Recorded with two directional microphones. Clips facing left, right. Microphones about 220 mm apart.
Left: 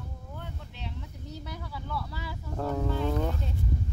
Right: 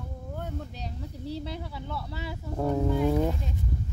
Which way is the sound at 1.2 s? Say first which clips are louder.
Right 8 dB; 30° right (ahead or behind).